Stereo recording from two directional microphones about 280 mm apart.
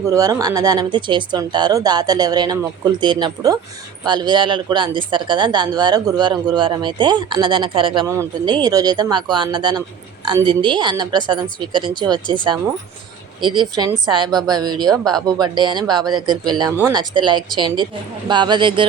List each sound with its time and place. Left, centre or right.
0.0 s speech: centre
13.4 s speech: centre